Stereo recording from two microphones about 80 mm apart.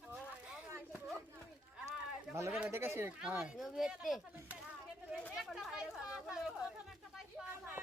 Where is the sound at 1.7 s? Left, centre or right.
Centre.